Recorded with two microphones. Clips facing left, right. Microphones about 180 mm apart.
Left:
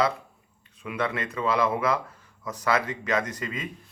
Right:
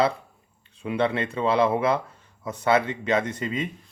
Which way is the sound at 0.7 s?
30° right (ahead or behind).